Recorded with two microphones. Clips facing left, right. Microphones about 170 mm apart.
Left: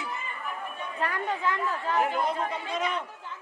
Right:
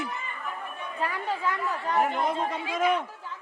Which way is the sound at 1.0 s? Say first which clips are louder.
Even; 10° right (ahead or behind).